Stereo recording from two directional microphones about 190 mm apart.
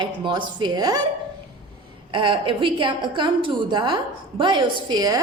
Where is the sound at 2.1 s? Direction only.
25° right (ahead or behind).